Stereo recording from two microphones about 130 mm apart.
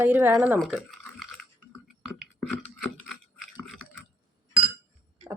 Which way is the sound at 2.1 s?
Centre (ahead or behind).